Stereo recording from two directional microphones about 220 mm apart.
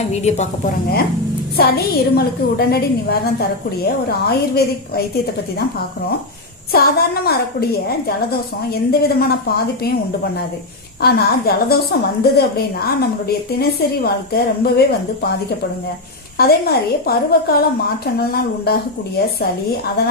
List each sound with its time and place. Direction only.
0.1 s a woman's voice: 30° left (ahead or behind)
6.7 s a woman's voice: 45° left (ahead or behind)
11.0 s a woman's voice: 45° left (ahead or behind)
16.4 s a woman's voice: 45° left (ahead or behind)